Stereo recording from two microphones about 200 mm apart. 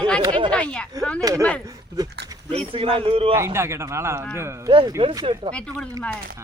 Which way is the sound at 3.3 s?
15° right (ahead or behind).